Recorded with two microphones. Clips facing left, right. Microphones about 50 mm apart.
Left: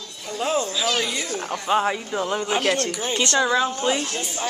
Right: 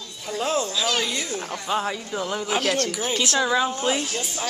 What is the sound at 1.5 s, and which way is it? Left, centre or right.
Speech, centre.